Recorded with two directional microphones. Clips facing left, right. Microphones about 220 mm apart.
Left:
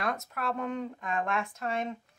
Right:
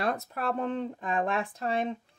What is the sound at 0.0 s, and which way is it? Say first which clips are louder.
Speech: right 3 dB; 35° right (ahead or behind).